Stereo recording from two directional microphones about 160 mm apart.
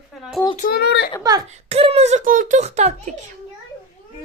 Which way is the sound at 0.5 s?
65° left (ahead or behind).